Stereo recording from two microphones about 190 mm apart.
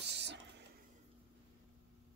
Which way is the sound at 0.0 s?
65° right (ahead or behind).